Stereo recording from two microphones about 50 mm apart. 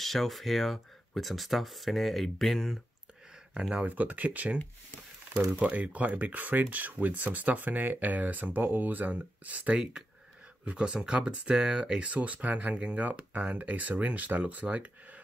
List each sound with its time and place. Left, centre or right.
0.0 s speech: centre
3.7 s speech: right
5.6 s speech: right; by 12.0 s centre
12.0 s speech: right